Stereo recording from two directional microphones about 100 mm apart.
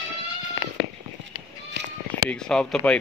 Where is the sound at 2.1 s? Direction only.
10° left (ahead or behind).